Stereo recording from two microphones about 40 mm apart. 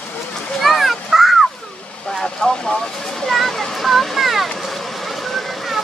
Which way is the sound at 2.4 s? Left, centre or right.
Left.